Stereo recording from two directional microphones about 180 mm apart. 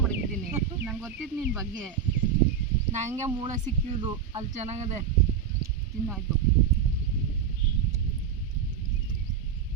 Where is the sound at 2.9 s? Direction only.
40° right (ahead or behind).